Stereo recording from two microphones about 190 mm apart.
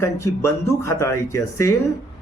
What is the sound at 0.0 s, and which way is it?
Speech, 15° left (ahead or behind).